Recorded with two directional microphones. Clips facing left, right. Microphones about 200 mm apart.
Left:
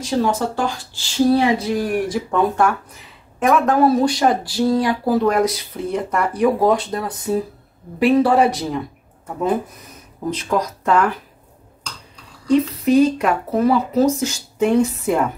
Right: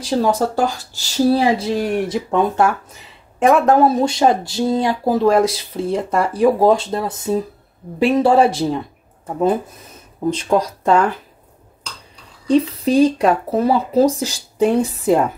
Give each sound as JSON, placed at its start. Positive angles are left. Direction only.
{"t": 0.0, "sound": "speech", "side_deg": -40}
{"t": 10.3, "sound": "speech", "side_deg": -30}
{"t": 12.4, "sound": "speech", "side_deg": -30}